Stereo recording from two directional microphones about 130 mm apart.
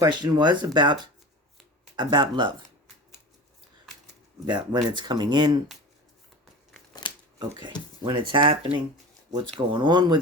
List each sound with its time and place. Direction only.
0.0 s speech: 30° right (ahead or behind)
2.0 s speech: 35° right (ahead or behind)
4.4 s speech: 35° right (ahead or behind)
6.4 s scissors: centre (ahead or behind)
8.0 s speech: 40° right (ahead or behind)